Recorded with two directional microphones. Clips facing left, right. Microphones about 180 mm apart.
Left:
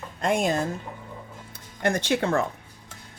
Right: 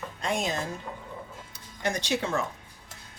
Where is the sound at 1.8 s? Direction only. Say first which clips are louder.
Left 5 dB; 55° left (ahead or behind).